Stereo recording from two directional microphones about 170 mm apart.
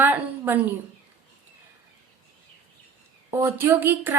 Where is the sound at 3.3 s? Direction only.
15° right (ahead or behind).